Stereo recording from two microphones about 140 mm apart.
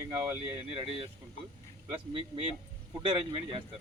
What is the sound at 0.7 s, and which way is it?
Speech, 45° right (ahead or behind).